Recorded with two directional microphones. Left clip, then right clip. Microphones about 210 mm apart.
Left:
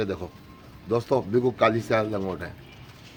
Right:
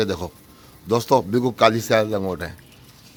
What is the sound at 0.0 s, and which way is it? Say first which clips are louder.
A man's voice: right 6 dB; 55° right (ahead or behind).